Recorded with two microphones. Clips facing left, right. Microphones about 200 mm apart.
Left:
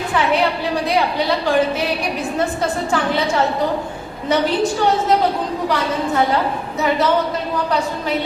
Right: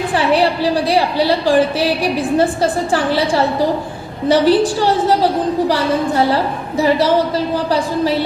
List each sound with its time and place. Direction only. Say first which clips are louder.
0.1 s a woman's voice: right 3 dB; 35° right (ahead or behind)